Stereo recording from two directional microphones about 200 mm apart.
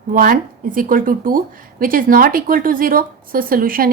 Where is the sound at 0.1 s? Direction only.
45° right (ahead or behind).